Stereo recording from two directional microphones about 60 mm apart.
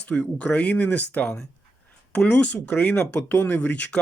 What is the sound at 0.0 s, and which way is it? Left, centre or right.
Speech, left.